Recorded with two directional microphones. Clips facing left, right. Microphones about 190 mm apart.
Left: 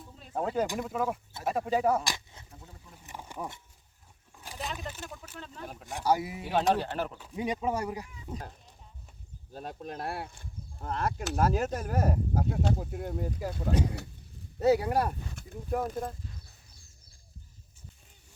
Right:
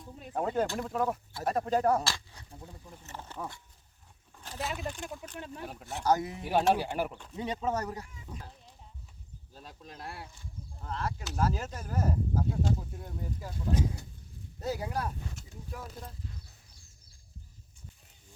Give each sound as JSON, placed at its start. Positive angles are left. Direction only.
{"t": 0.3, "sound": "speech", "side_deg": 5}
{"t": 2.0, "sound": "a sound", "side_deg": 20}
{"t": 4.9, "sound": "speech", "side_deg": -15}
{"t": 5.8, "sound": "speech", "side_deg": 10}
{"t": 6.4, "sound": "speech", "side_deg": -10}
{"t": 7.2, "sound": "speech", "side_deg": 10}
{"t": 9.5, "sound": "speech", "side_deg": 60}